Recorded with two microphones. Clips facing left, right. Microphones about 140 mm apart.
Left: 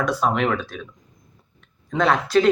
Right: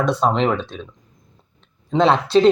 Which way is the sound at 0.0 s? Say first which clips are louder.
Right 3 dB; 25° right (ahead or behind).